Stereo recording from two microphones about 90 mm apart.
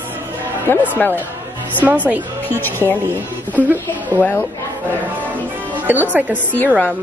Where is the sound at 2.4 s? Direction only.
25° left (ahead or behind).